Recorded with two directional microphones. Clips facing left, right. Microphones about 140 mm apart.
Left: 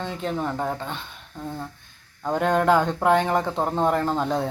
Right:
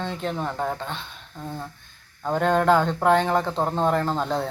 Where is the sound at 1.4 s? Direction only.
Centre (ahead or behind).